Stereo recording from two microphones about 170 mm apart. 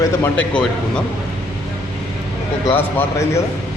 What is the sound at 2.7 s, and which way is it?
Speech, 15° left (ahead or behind).